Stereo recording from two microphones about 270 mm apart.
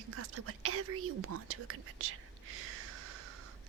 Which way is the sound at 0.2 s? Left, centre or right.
Right.